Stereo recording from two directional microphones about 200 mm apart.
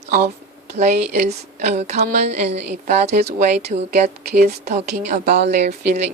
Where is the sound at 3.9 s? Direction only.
50° right (ahead or behind).